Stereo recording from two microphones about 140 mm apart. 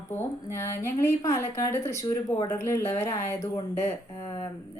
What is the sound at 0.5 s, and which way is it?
Speech, 20° left (ahead or behind).